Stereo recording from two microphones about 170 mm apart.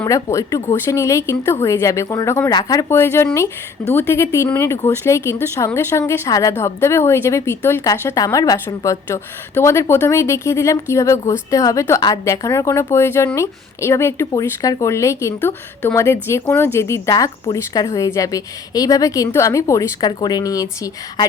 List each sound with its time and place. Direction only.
0.0 s speech: 15° left (ahead or behind)